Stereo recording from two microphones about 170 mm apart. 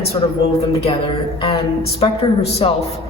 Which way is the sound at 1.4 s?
35° left (ahead or behind).